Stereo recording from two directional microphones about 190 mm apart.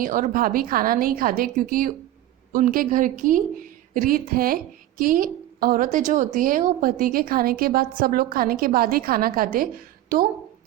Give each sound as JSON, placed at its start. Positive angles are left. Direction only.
{"t": 0.0, "sound": "speech", "side_deg": -45}